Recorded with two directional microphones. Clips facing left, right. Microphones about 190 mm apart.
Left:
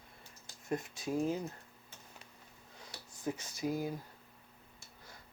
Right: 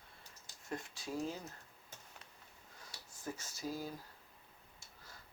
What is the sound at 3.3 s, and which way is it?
Speech, 15° left (ahead or behind).